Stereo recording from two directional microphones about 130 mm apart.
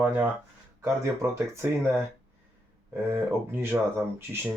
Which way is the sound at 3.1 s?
10° right (ahead or behind).